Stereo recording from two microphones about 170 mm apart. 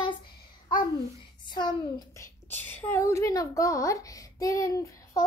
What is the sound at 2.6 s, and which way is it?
A child's voice, 10° left (ahead or behind).